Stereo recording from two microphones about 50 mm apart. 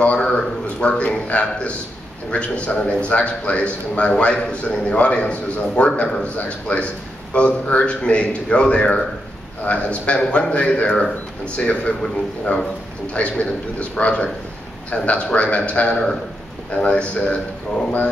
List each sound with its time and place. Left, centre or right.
0.2 s a man's voice: left
13.1 s a man's voice: left